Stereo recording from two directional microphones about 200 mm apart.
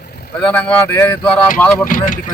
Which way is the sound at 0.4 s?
5° left (ahead or behind).